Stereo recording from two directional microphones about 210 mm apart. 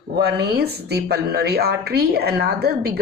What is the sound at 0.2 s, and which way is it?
A woman's voice, 50° right (ahead or behind).